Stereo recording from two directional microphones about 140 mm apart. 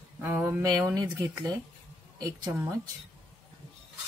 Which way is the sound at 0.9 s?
30° right (ahead or behind).